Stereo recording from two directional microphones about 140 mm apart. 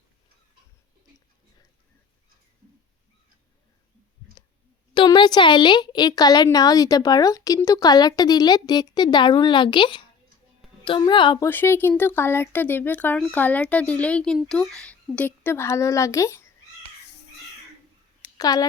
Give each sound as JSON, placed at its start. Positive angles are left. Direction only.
{"t": 4.9, "sound": "a woman's voice", "side_deg": 35}
{"t": 11.3, "sound": "speech", "side_deg": 15}
{"t": 18.3, "sound": "speech", "side_deg": 30}